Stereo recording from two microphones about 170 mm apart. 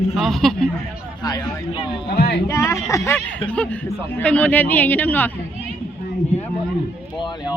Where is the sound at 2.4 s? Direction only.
15° left (ahead or behind).